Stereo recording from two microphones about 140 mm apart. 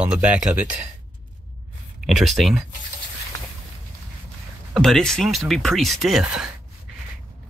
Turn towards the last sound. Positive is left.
turn(degrees=0)  # may be behind; listen again after turning